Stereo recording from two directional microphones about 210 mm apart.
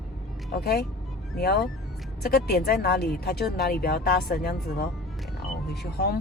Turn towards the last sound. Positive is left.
turn(degrees=50)  # may be behind; listen again after turning